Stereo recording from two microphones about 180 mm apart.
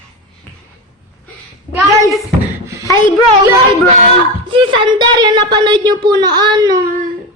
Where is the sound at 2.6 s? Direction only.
15° right (ahead or behind).